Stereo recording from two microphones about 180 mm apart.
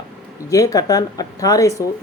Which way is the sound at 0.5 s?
20° left (ahead or behind).